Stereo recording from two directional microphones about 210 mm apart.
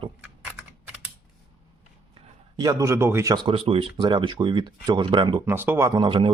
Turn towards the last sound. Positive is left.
turn(degrees=-25)  # may be behind; listen again after turning